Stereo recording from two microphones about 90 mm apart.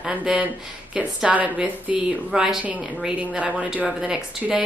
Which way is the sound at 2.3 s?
5° right (ahead or behind).